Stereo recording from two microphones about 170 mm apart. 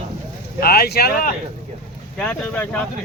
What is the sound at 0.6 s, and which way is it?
Speech, 65° left (ahead or behind).